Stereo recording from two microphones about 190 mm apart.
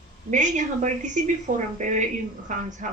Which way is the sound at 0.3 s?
40° right (ahead or behind).